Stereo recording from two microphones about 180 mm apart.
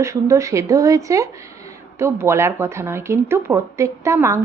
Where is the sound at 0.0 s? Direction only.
15° right (ahead or behind).